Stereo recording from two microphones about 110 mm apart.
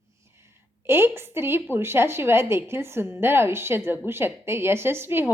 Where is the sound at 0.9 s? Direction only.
20° right (ahead or behind).